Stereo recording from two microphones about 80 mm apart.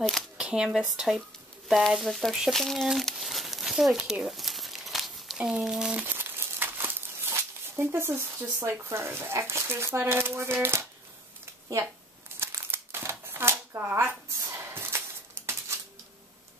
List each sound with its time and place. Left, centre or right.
0.4 s a sound: centre
0.7 s speech: centre
6.0 s speech: right
12.4 s crumpling: right
13.2 s shuffling cards: right
14.3 s a sound: right
15.4 s coin: right